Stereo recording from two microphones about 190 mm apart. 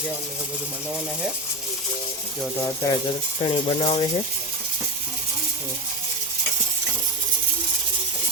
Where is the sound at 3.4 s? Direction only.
30° left (ahead or behind).